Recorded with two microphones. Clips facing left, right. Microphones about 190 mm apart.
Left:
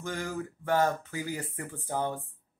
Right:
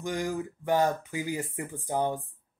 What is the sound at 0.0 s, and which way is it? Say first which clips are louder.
Speech: right 4 dB; 15° right (ahead or behind).